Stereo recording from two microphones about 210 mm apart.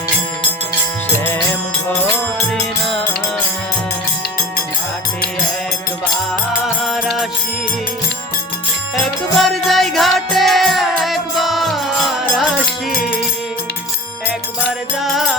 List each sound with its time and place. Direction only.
2.5 s music: 5° left (ahead or behind)
6.8 s music: centre (ahead or behind)
9.0 s music: centre (ahead or behind)
12.9 s music: 40° left (ahead or behind)
14.7 s music: centre (ahead or behind)